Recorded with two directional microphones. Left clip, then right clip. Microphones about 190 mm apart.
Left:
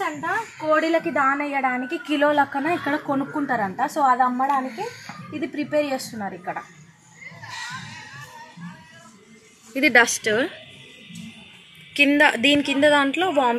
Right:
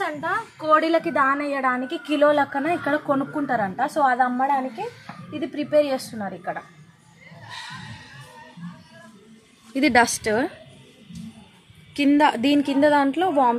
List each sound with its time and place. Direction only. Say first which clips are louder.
0.0 s a woman's voice: even; 5° right (ahead or behind)
9.8 s a woman's voice: left 2 dB; 65° right (ahead or behind)
11.9 s a woman's voice: left 2 dB; 65° right (ahead or behind)